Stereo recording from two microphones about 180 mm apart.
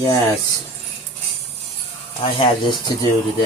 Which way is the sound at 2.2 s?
30° left (ahead or behind).